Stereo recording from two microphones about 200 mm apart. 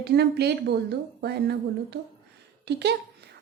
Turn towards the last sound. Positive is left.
turn(degrees=-55)  # may be behind; listen again after turning